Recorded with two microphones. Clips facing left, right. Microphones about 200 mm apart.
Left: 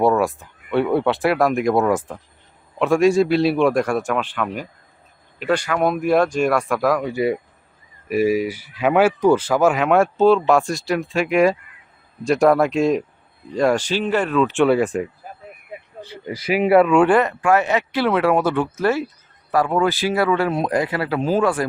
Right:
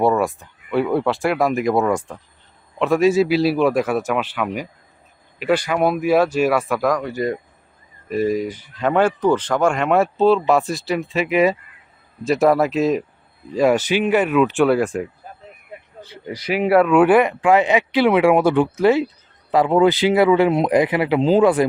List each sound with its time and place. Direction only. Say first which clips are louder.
0.0 s speech: even; centre (ahead or behind)
8.0 s speech: left 2 dB; 10° left (ahead or behind)
15.7 s a sound: left 2 dB; 15° left (ahead or behind)
16.5 s speech: left 1 dB; centre (ahead or behind); by 21.7 s 20° right (ahead or behind)